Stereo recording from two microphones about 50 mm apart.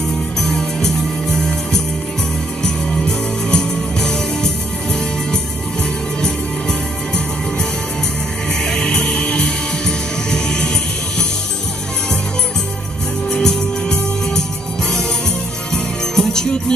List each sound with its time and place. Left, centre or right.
0.4 s music: centre
2.6 s music: centre
8.6 s music: centre
13.3 s music: centre
15.7 s music: centre